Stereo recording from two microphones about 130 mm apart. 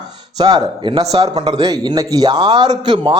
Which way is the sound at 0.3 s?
35° right (ahead or behind).